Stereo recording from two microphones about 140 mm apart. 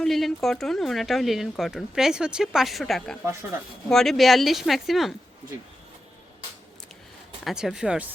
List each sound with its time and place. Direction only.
0.0 s speech: centre (ahead or behind)
7.4 s speech: 5° right (ahead or behind)